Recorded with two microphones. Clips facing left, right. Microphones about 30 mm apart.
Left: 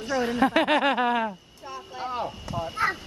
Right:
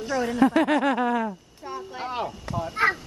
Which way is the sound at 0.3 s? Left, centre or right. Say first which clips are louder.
Right 2 dB; left.